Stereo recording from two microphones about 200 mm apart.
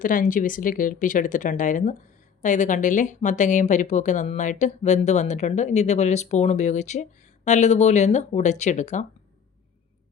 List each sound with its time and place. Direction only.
0.0 s speech: 40° left (ahead or behind)